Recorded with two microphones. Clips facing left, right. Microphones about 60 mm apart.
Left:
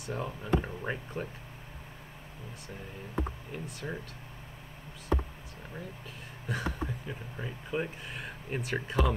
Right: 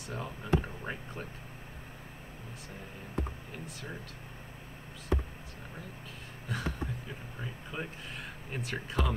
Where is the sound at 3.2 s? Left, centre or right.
Centre.